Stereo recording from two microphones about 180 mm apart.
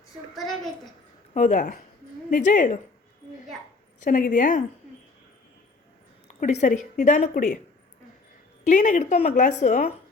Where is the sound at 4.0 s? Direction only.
50° left (ahead or behind).